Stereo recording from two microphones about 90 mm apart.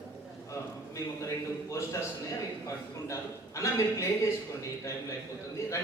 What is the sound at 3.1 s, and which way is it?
Speech, 35° left (ahead or behind).